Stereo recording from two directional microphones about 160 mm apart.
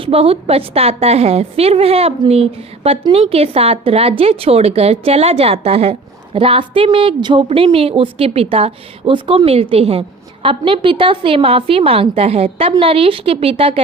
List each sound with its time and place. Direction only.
0.0 s a woman's voice: 35° right (ahead or behind)